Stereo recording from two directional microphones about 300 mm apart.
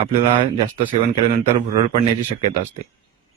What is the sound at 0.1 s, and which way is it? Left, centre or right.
Speech, centre.